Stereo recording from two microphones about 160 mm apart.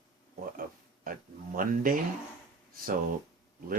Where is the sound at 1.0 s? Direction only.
60° right (ahead or behind).